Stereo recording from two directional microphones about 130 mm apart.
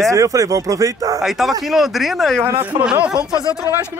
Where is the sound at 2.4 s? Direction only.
15° right (ahead or behind).